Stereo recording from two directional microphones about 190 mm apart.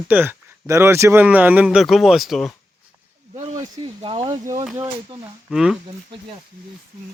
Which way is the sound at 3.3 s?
40° right (ahead or behind).